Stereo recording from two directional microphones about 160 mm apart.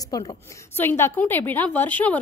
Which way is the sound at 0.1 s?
25° left (ahead or behind).